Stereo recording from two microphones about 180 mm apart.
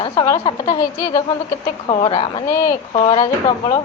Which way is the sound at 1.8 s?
30° left (ahead or behind).